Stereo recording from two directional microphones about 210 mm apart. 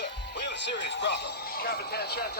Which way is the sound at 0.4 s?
55° left (ahead or behind).